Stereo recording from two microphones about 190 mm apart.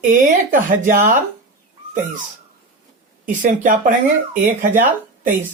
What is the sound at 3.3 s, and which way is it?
Speech, 45° right (ahead or behind).